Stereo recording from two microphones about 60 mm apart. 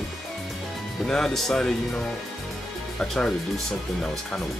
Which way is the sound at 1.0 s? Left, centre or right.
Centre.